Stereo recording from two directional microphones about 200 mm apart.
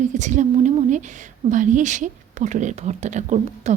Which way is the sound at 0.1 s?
35° right (ahead or behind).